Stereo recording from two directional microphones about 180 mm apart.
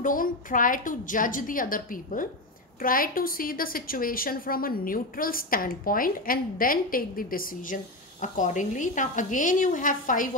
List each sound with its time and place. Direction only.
0.0 s a woman's voice: 50° left (ahead or behind)